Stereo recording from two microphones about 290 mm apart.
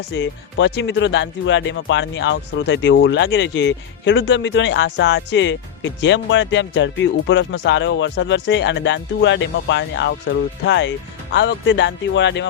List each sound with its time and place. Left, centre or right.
0.1 s speech: left